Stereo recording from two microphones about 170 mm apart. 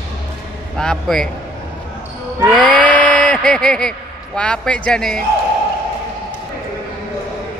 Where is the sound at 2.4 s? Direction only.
Centre (ahead or behind).